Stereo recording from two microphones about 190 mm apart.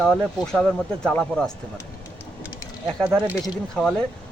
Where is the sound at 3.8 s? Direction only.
5° left (ahead or behind).